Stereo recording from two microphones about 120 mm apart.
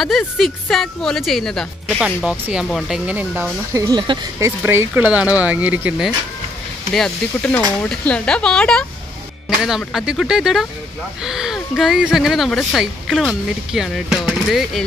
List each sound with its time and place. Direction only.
0.0 s speech: centre (ahead or behind)
2.0 s speech: 5° right (ahead or behind)
3.7 s speech: 25° right (ahead or behind)
6.9 s speech: 5° left (ahead or behind)